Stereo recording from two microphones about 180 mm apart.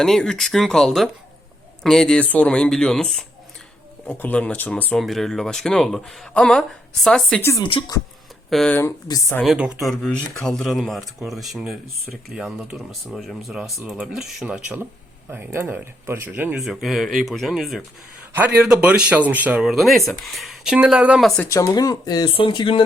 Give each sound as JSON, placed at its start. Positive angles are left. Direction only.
{"t": 0.0, "sound": "speech", "side_deg": 5}
{"t": 7.6, "sound": "speech", "side_deg": 30}
{"t": 8.4, "sound": "speech", "side_deg": 5}
{"t": 9.0, "sound": "speech", "side_deg": 20}
{"t": 9.4, "sound": "speech", "side_deg": -5}
{"t": 21.5, "sound": "speech", "side_deg": 20}